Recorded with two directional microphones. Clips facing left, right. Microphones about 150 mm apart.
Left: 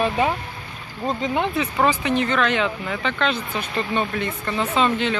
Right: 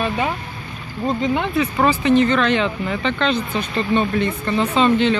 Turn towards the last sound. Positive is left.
turn(degrees=5)  # may be behind; listen again after turning